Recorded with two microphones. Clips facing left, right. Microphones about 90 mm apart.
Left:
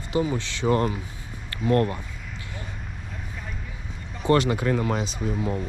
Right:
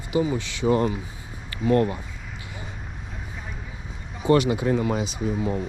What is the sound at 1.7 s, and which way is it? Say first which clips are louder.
Speech: right 1 dB; 20° right (ahead or behind).